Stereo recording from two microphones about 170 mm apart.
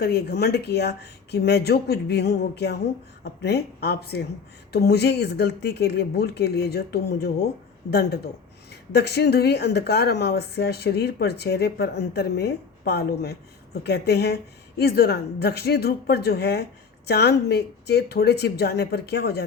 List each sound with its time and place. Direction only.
0.0 s speech: 70° left (ahead or behind)